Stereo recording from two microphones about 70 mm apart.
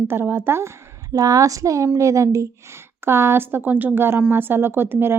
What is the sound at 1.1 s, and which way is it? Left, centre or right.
A woman's voice, right.